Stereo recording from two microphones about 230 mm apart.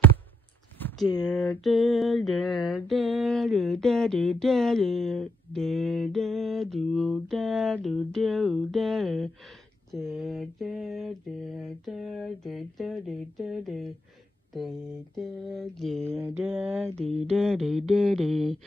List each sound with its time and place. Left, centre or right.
0.7 s a sound: centre
1.6 s mantra: centre
15.1 s mantra: centre
16.3 s a sound: centre
16.8 s mantra: right
17.3 s mantra: centre